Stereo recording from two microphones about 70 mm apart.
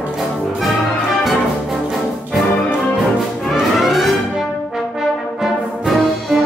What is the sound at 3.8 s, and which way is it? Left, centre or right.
Music, centre.